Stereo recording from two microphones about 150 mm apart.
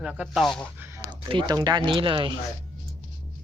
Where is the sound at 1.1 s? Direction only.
30° right (ahead or behind).